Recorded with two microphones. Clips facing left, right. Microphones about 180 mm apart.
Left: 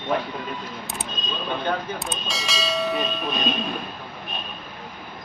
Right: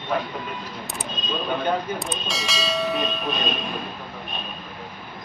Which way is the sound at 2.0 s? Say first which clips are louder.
Right 2 dB; centre (ahead or behind).